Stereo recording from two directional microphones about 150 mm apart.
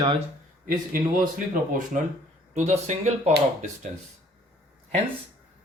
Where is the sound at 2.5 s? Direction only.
50° right (ahead or behind).